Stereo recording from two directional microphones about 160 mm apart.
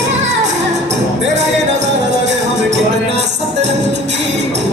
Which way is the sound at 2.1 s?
90° right.